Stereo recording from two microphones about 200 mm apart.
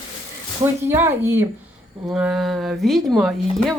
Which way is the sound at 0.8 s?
10° right (ahead or behind).